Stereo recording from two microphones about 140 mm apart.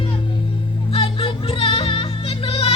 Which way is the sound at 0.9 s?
40° left (ahead or behind).